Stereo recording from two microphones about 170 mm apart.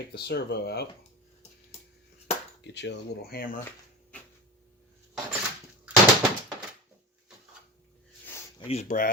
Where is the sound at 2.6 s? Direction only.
90° left.